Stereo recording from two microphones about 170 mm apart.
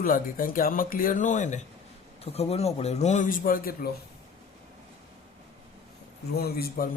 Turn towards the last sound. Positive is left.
turn(degrees=65)  # may be behind; listen again after turning